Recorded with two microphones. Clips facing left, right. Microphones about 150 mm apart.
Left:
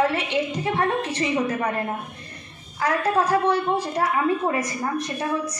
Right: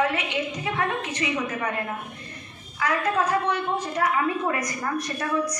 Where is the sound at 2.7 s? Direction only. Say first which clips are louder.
Left 3 dB; 35° left (ahead or behind).